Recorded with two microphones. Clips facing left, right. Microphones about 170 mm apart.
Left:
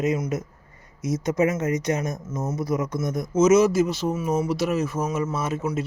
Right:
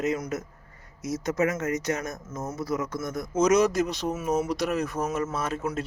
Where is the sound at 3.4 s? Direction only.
5° left (ahead or behind).